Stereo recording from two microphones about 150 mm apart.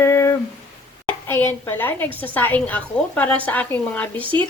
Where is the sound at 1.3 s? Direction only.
15° left (ahead or behind).